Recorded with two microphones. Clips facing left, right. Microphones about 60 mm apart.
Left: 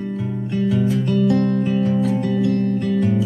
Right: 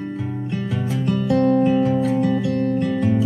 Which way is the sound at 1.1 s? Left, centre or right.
Centre.